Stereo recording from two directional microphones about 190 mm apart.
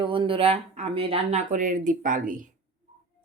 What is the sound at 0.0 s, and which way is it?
Speech, 25° right (ahead or behind).